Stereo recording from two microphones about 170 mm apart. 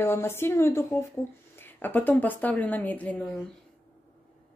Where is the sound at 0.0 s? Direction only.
15° left (ahead or behind).